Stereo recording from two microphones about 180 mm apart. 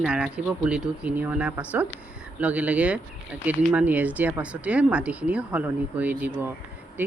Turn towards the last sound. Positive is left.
turn(degrees=-10)  # may be behind; listen again after turning